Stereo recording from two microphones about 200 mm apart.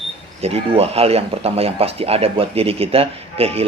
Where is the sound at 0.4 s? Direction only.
30° right (ahead or behind).